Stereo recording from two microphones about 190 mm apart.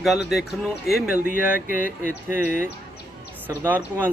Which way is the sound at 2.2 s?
10° right (ahead or behind).